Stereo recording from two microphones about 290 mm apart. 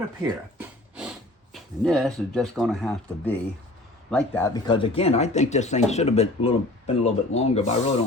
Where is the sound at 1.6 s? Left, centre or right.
Centre.